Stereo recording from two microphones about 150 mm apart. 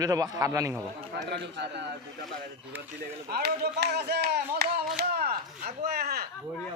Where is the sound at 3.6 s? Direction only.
90° right.